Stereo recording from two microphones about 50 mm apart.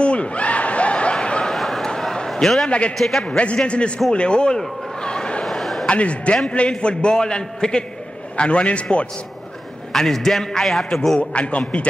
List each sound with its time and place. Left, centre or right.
0.0 s snicker: left
1.5 s a sound: centre
2.4 s a man's voice: centre
3.3 s a man's voice: left
4.6 s a sound: centre
5.4 s a sound: centre
5.9 s a man's voice: left
9.9 s a man's voice: centre
11.1 s a man's voice: left